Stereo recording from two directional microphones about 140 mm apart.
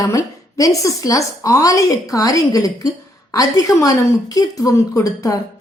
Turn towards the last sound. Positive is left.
turn(degrees=25)  # may be behind; listen again after turning